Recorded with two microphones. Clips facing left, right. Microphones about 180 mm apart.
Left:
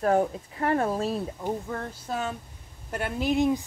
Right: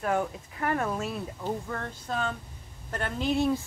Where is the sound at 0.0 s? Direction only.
35° left (ahead or behind).